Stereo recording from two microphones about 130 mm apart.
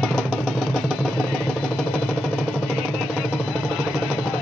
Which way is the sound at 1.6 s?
5° right (ahead or behind).